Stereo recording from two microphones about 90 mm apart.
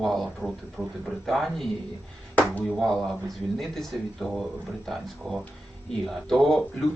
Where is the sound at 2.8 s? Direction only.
Centre (ahead or behind).